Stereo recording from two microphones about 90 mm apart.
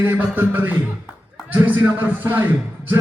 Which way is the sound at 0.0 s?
20° right (ahead or behind).